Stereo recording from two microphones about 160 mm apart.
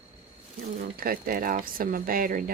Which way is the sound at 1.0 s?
65° right (ahead or behind).